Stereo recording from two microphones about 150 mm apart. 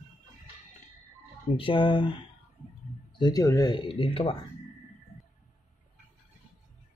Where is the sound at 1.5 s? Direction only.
35° left (ahead or behind).